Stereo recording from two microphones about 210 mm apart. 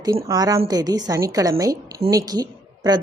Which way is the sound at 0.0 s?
15° right (ahead or behind).